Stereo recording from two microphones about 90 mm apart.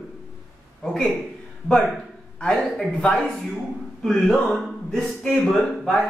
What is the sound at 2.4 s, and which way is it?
Speech, 10° left (ahead or behind).